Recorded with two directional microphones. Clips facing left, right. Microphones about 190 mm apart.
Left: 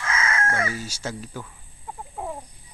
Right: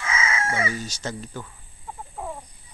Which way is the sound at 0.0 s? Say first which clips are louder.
Even; 5° right (ahead or behind).